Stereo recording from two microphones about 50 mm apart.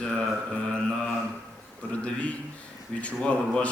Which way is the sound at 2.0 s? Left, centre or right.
Left.